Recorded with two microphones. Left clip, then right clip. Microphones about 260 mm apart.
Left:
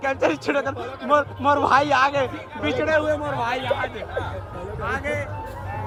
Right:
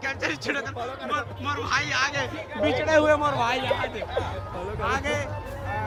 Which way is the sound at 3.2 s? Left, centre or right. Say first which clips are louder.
Right 1 dB; centre.